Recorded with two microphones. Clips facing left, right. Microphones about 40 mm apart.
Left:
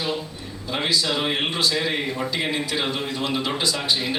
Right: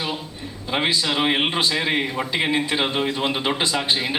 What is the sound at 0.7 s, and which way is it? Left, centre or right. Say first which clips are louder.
A man's voice: right 2 dB; right.